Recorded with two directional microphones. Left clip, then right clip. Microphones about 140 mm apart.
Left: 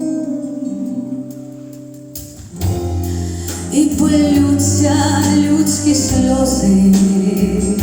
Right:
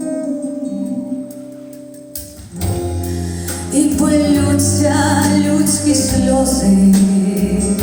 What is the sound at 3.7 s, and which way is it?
Music, 20° left (ahead or behind).